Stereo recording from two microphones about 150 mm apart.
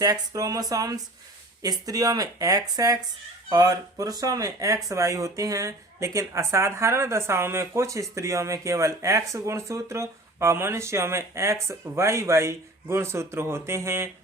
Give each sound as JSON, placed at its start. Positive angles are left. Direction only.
{"t": 0.0, "sound": "speech", "side_deg": -25}